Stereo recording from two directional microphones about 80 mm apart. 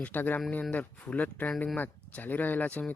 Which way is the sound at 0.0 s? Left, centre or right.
Left.